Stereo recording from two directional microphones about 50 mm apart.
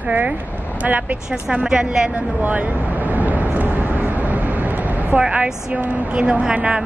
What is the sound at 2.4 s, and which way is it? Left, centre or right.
Vehicle, right.